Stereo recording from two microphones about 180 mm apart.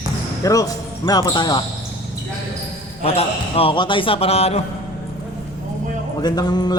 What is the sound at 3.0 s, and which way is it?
A man's voice, 35° left (ahead or behind).